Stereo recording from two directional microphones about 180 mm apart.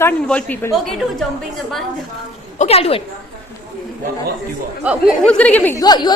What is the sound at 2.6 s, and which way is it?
Speech, 35° left (ahead or behind).